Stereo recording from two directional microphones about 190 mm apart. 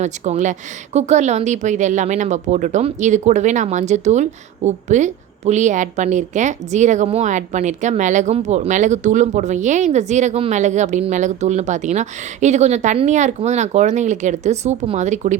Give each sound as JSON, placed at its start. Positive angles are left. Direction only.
{"t": 0.0, "sound": "speech", "side_deg": -40}